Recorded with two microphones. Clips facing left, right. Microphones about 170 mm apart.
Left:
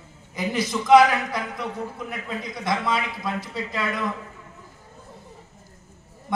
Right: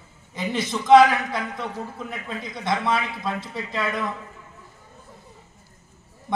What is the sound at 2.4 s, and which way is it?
A man's voice, 25° right (ahead or behind).